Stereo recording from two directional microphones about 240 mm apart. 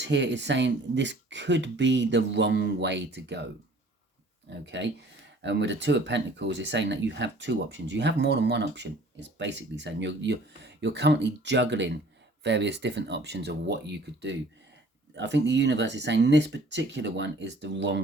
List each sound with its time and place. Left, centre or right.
0.0 s speech: right
4.4 s speech: right